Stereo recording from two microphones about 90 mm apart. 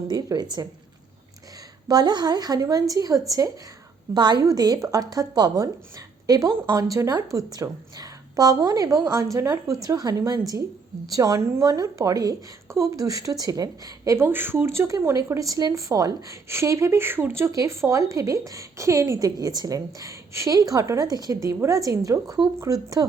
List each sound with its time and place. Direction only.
0.1 s a woman's voice: 50° right (ahead or behind)
1.9 s a woman's voice: 50° right (ahead or behind)
4.1 s a woman's voice: 50° right (ahead or behind)
14.3 s speech: 25° right (ahead or behind); by 23.0 s 40° right (ahead or behind)